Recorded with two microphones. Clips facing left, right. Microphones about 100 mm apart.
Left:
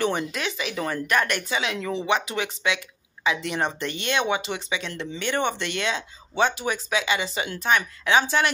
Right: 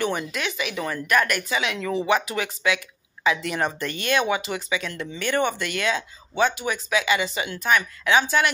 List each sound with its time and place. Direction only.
0.0 s speech: 35° left (ahead or behind)